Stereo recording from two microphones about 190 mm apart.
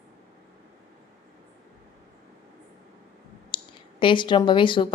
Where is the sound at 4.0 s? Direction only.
25° left (ahead or behind).